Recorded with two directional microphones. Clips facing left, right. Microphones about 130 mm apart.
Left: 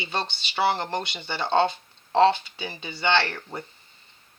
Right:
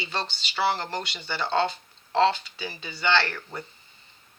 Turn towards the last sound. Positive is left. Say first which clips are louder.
# left 1 dB
turn(degrees=25)  # may be behind; listen again after turning